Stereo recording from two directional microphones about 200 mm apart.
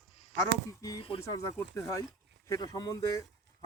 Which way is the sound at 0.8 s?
20° left (ahead or behind).